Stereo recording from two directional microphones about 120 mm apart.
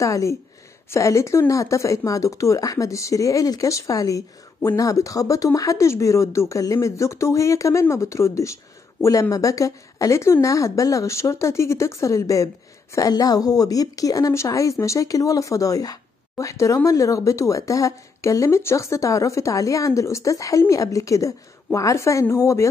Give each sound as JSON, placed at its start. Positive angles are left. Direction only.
{"t": 0.0, "sound": "speech", "side_deg": 25}